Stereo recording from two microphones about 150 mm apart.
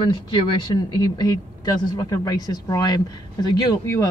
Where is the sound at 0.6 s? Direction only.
30° left (ahead or behind).